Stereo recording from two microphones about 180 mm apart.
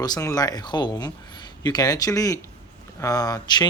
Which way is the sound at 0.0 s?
20° left (ahead or behind).